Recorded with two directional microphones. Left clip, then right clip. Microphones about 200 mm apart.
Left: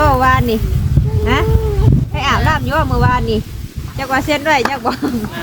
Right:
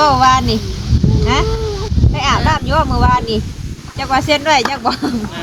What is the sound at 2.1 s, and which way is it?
Speech, 25° right (ahead or behind).